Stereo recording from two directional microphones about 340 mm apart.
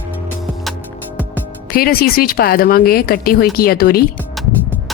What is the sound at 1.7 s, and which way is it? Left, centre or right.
Speech, left.